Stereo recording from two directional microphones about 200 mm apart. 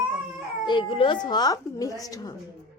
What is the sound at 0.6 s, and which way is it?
A woman's voice, 25° left (ahead or behind).